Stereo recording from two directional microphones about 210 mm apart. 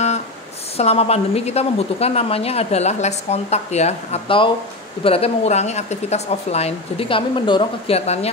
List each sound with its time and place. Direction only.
0.7 s a woman's voice: 30° left (ahead or behind)